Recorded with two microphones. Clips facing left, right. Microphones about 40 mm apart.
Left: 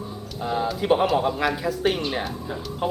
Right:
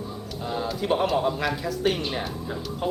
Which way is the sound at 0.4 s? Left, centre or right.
Centre.